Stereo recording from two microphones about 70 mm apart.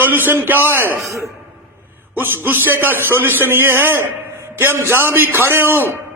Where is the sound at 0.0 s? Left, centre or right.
Right.